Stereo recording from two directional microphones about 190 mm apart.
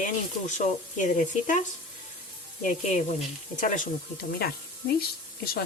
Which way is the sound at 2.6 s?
40° left (ahead or behind).